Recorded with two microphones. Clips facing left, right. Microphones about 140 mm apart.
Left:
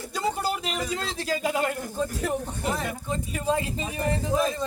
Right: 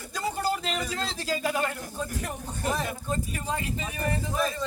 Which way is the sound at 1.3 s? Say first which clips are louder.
Left 2 dB; 20° left (ahead or behind).